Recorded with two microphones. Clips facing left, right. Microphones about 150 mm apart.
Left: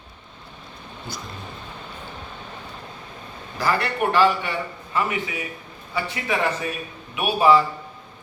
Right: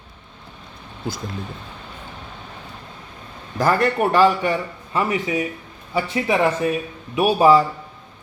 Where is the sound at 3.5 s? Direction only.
45° right (ahead or behind).